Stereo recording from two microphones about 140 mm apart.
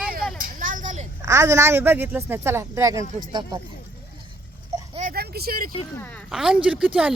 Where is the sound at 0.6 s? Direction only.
70° right (ahead or behind).